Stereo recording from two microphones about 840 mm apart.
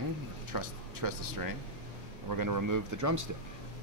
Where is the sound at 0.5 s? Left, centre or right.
Right.